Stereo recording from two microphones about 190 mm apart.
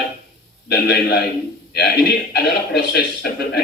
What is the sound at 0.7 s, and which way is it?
Speech, 60° left (ahead or behind).